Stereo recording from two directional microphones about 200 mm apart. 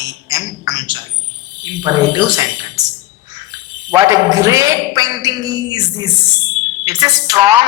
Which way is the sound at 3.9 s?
15° right (ahead or behind).